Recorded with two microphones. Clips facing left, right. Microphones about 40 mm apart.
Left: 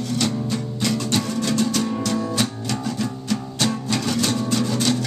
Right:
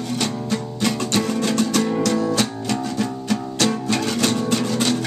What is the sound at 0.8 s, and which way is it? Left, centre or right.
Music, right.